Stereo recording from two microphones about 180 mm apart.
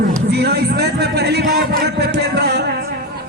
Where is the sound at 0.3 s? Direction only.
65° right (ahead or behind).